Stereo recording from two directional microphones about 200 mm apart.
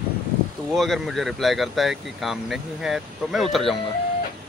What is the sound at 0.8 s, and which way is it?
Speech, centre (ahead or behind).